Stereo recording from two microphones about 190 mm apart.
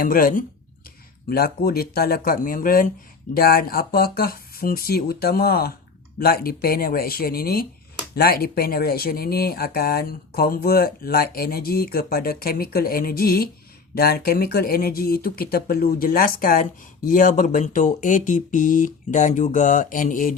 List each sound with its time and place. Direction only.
0.0 s speech: 50° left (ahead or behind)